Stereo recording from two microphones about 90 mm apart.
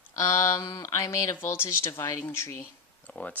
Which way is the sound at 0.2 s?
35° left (ahead or behind).